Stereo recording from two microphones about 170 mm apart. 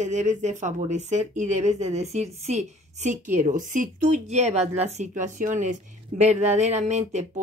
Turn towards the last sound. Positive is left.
turn(degrees=-45)  # may be behind; listen again after turning